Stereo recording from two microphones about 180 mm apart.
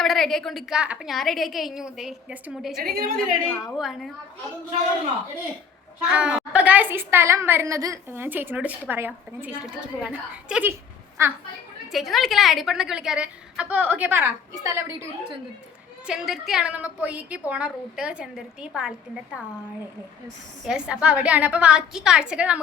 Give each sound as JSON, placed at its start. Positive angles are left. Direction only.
{"t": 0.0, "sound": "a woman's voice", "side_deg": 0}
{"t": 2.7, "sound": "a woman's voice", "side_deg": -55}
{"t": 3.2, "sound": "a woman's voice", "side_deg": 5}
{"t": 6.1, "sound": "a woman's voice", "side_deg": -5}
{"t": 11.9, "sound": "a woman's voice", "side_deg": 0}
{"t": 16.0, "sound": "a woman's voice", "side_deg": -5}
{"t": 20.7, "sound": "a woman's voice", "side_deg": -5}